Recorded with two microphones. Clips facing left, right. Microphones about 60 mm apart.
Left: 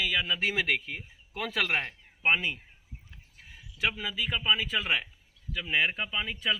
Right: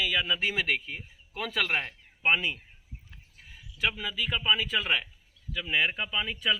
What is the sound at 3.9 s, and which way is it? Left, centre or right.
Speech, left.